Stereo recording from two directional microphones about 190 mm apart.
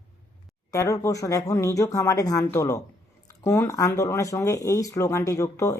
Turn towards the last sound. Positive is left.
turn(degrees=15)  # may be behind; listen again after turning